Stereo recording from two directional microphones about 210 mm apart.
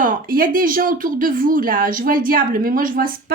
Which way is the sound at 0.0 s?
40° right (ahead or behind).